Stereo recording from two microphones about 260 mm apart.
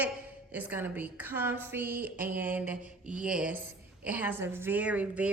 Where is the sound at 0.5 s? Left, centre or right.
Centre.